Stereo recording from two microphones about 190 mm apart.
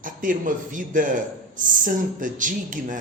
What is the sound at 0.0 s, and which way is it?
Speech, 45° right (ahead or behind).